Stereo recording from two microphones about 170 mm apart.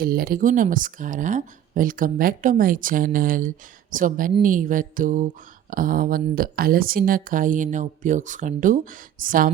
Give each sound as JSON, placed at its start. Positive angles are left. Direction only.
{"t": 0.0, "sound": "speech", "side_deg": -60}